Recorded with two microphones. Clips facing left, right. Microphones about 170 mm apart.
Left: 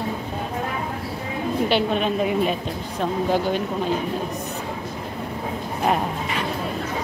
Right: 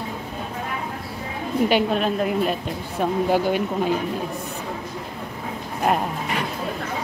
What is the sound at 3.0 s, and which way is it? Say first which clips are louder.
Speech: right 2 dB; 10° right (ahead or behind).